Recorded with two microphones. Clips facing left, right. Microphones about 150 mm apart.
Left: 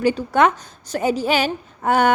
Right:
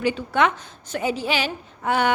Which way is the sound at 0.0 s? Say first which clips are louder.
Left 4 dB; 40° left (ahead or behind).